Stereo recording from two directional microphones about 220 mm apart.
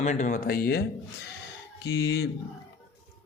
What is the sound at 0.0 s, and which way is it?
Speech, 35° left (ahead or behind).